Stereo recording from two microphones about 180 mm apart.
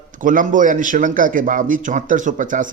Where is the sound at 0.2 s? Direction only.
45° right (ahead or behind).